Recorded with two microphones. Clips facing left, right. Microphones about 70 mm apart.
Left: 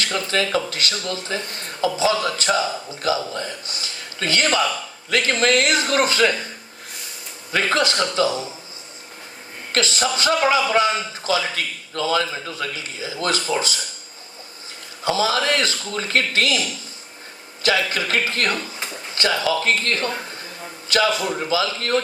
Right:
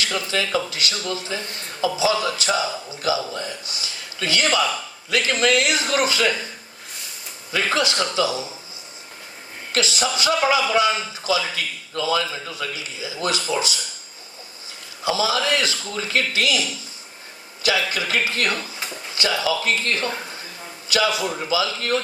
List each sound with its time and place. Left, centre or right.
0.0 s a man's voice: left
7.5 s a man's voice: left
9.7 s a man's voice: left
15.0 s a man's voice: left
17.6 s a man's voice: left